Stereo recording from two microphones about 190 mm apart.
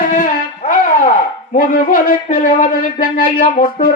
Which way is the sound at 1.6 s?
45° left (ahead or behind).